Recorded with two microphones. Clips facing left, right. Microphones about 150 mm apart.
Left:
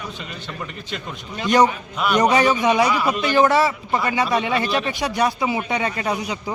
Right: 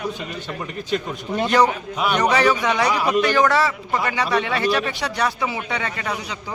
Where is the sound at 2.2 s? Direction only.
15° left (ahead or behind).